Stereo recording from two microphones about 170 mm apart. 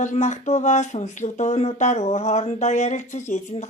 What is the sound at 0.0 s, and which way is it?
Speech, 45° left (ahead or behind).